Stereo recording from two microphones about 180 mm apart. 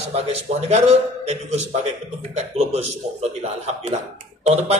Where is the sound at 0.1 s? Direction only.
35° right (ahead or behind).